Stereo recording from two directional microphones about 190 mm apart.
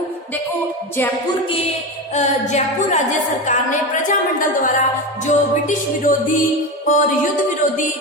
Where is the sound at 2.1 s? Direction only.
35° left (ahead or behind).